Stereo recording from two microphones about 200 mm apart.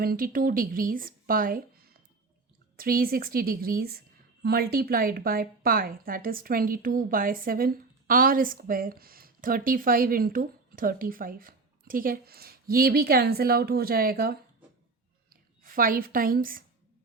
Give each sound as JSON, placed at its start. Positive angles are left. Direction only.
{"t": 0.0, "sound": "a woman's voice", "side_deg": -45}
{"t": 15.6, "sound": "a woman's voice", "side_deg": -45}